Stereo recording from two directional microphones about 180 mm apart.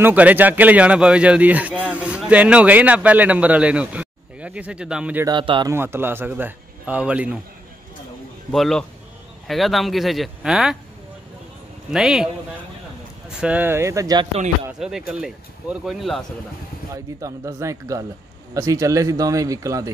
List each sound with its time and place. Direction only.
0.0 s a man's voice: 10° right (ahead or behind)
5.2 s a man's voice: 25° right (ahead or behind)
5.7 s a man's voice: 15° right (ahead or behind)
8.5 s speech: 5° left (ahead or behind)
11.9 s speech: 5° right (ahead or behind)
13.4 s a man's voice: 10° right (ahead or behind)
14.8 s speech: 5° right (ahead or behind)
16.9 s a man's voice: 15° right (ahead or behind)